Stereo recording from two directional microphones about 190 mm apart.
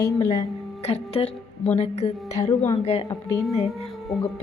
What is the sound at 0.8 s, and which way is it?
A woman's voice, 30° left (ahead or behind).